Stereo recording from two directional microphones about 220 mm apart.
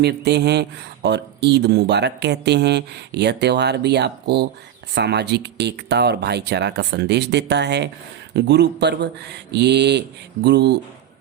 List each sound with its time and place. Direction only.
0.0 s speech: 50° right (ahead or behind)